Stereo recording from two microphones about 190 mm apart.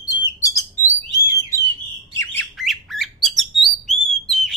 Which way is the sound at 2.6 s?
Centre (ahead or behind).